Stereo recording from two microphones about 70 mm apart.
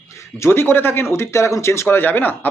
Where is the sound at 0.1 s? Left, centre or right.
Left.